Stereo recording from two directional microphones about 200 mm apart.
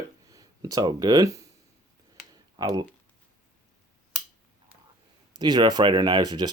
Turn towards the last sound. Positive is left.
turn(degrees=-20)  # may be behind; listen again after turning